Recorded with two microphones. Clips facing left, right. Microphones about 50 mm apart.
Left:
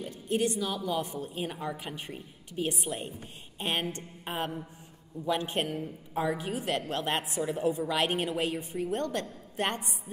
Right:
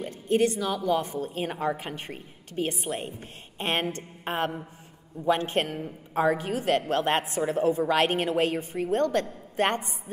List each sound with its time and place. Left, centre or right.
0.1 s a woman's voice: right
2.5 s a woman's voice: right
2.8 s a woman's voice: right
6.1 s a woman's voice: right